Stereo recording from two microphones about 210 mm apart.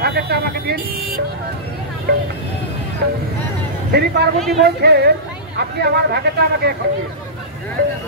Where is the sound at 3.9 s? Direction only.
50° right (ahead or behind).